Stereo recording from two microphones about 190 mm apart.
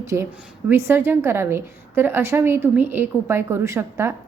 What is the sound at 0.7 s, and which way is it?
A woman's voice, 10° right (ahead or behind).